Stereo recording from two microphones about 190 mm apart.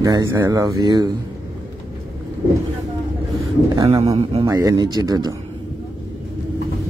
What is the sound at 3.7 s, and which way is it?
Speech, 15° right (ahead or behind).